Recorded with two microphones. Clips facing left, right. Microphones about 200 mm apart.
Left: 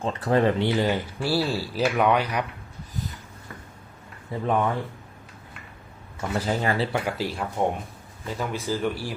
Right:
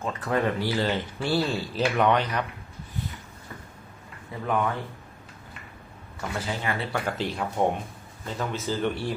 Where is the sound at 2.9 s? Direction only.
40° left (ahead or behind).